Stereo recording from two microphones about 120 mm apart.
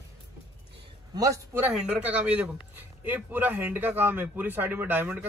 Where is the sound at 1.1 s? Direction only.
30° right (ahead or behind).